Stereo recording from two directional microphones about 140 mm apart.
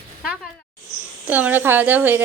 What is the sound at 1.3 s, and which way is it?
Speech, 10° right (ahead or behind).